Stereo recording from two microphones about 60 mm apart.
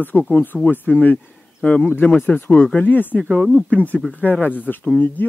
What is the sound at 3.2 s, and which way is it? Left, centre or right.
Speech, centre.